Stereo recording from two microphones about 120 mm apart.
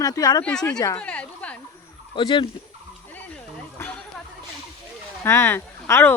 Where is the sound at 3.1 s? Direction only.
15° left (ahead or behind).